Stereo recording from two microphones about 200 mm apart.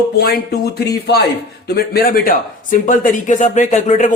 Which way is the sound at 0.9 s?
55° left (ahead or behind).